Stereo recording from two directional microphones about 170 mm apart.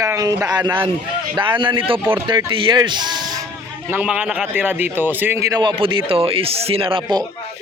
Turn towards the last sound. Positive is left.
turn(degrees=-30)  # may be behind; listen again after turning